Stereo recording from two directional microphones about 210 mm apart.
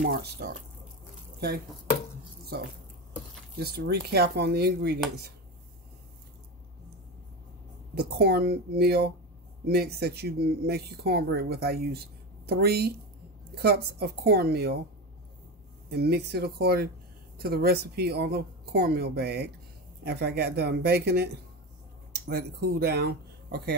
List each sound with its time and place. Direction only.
0.0 s speech: 50° right (ahead or behind)
2.5 s speech: 50° right (ahead or behind)
7.9 s speech: 50° right (ahead or behind)
15.9 s speech: 50° right (ahead or behind)